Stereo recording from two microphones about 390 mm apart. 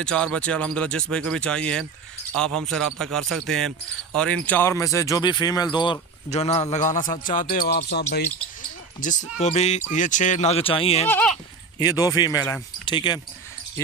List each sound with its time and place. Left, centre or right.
0.0 s speech: centre